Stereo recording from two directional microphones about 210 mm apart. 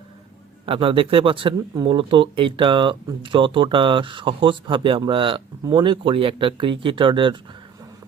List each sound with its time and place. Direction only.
0.6 s speech: 25° right (ahead or behind)